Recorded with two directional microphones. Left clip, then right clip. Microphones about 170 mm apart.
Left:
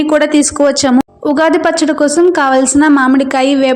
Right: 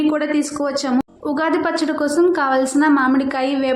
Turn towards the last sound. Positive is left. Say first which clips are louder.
# left 8 dB
turn(degrees=40)  # may be behind; listen again after turning